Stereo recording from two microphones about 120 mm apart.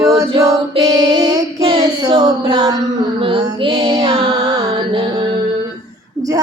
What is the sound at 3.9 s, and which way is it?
Music, 35° right (ahead or behind).